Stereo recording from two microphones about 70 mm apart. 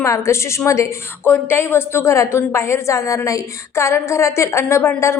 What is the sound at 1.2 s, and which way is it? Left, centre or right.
Speech, left.